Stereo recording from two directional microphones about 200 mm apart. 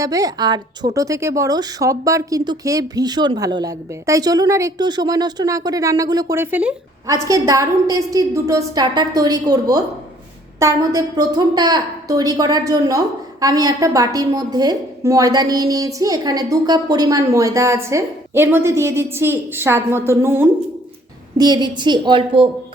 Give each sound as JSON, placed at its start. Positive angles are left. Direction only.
{"t": 0.0, "sound": "a woman's voice", "side_deg": -15}